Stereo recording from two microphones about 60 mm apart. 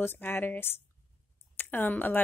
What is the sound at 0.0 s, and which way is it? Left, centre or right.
Speech, left.